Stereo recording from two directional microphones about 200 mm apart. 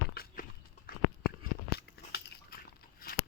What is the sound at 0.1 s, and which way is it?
Walk, 50° left (ahead or behind).